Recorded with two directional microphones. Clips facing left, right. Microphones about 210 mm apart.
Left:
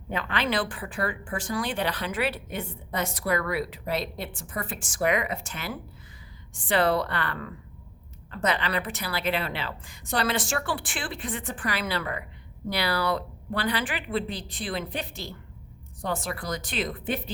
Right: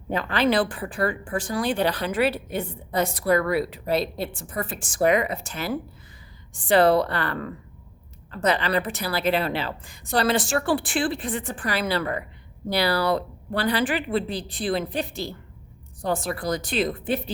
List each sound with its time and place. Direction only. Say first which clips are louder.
0.1 s speech: right 6 dB; 35° right (ahead or behind)